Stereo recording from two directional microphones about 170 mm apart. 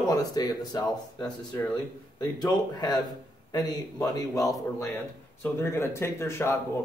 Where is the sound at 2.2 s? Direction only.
20° left (ahead or behind).